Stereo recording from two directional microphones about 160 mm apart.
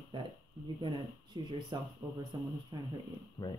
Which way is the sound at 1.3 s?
30° right (ahead or behind).